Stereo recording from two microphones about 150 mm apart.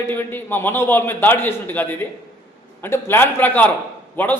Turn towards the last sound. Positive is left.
turn(degrees=10)  # may be behind; listen again after turning